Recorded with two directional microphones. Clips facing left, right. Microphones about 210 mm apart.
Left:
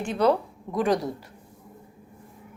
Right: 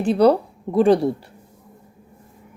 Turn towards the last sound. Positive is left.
turn(degrees=-30)  # may be behind; listen again after turning